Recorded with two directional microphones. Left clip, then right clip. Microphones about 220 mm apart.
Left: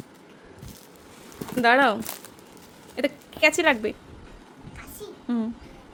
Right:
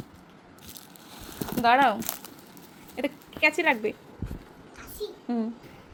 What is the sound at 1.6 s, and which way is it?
Speech, 30° left (ahead or behind).